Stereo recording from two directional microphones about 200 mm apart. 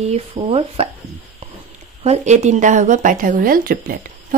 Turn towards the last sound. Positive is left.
turn(degrees=-45)  # may be behind; listen again after turning